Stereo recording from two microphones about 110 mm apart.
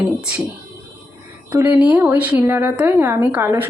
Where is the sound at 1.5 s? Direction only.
20° right (ahead or behind).